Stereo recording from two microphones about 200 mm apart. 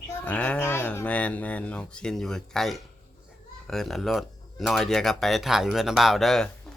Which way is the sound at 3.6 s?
Centre (ahead or behind).